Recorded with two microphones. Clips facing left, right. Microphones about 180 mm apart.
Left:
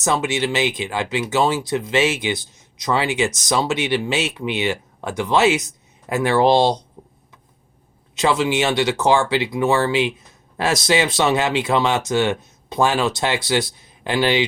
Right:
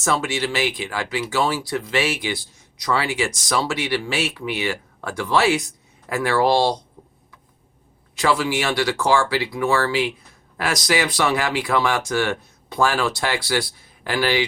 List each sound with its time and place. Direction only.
0.0 s speech: 20° left (ahead or behind)
7.0 s a sound: 20° left (ahead or behind)
8.1 s speech: 20° left (ahead or behind)